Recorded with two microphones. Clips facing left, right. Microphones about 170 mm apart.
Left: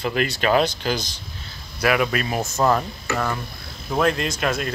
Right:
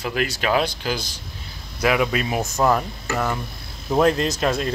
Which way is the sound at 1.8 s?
20° right (ahead or behind).